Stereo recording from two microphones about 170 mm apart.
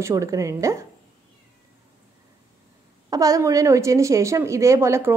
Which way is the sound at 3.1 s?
20° right (ahead or behind).